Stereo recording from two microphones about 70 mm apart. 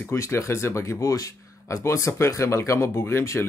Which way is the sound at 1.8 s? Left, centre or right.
Left.